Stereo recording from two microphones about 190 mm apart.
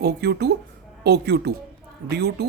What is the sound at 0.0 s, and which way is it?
Speech, 60° right (ahead or behind).